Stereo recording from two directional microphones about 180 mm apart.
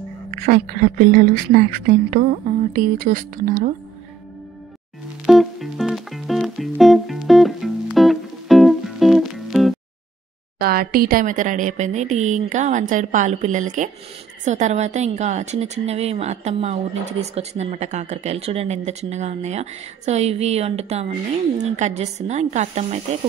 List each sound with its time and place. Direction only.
0.3 s speech: 50° right (ahead or behind)
5.2 s music: centre (ahead or behind)
10.6 s a woman's voice: 55° right (ahead or behind); by 23.0 s 40° right (ahead or behind)